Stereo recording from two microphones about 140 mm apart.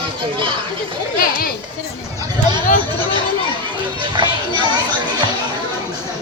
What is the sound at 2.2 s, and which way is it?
Chatter, 30° right (ahead or behind).